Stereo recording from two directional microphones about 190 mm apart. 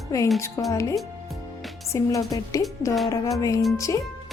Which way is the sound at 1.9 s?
15° left (ahead or behind).